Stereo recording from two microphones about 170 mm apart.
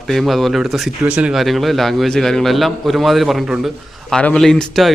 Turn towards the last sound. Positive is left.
turn(degrees=0)  # may be behind; listen again after turning